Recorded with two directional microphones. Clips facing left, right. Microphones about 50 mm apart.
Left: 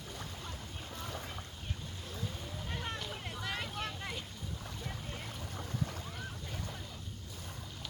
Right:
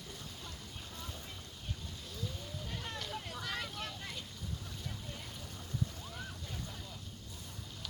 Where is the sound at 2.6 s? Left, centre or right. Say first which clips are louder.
Left 4 dB; left.